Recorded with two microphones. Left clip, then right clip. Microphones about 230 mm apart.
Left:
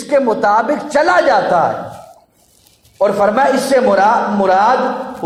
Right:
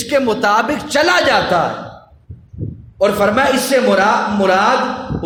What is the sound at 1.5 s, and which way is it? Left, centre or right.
Speech, right.